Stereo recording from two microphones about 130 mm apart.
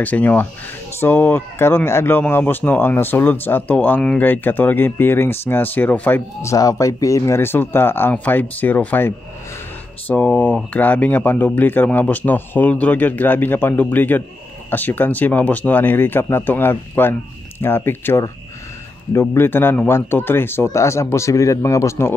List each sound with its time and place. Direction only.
0.0 s speech: 10° left (ahead or behind)